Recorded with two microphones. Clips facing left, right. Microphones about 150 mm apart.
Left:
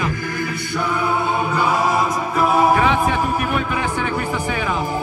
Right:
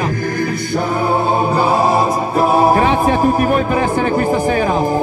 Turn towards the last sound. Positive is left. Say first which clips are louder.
# right 7 dB
turn(degrees=-40)  # may be behind; listen again after turning